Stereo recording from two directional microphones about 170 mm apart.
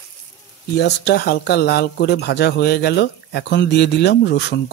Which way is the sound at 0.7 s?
75° left (ahead or behind).